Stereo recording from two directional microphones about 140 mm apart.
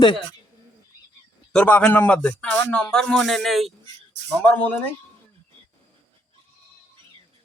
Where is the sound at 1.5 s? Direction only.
10° left (ahead or behind).